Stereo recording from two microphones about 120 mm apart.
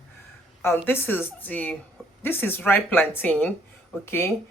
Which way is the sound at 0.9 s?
15° left (ahead or behind).